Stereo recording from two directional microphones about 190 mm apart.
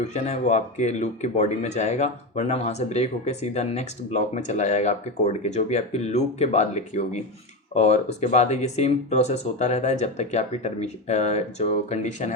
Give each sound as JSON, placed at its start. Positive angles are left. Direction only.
{"t": 0.1, "sound": "speech", "side_deg": 35}